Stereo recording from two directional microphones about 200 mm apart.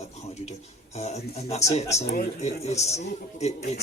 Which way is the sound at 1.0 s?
30° left (ahead or behind).